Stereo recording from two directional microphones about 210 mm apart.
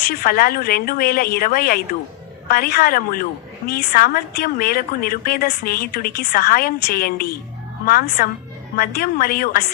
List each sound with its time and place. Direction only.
0.0 s a woman's voice: 45° left (ahead or behind)